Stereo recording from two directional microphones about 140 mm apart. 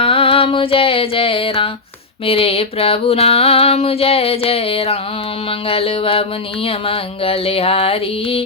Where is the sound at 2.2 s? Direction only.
45° left (ahead or behind).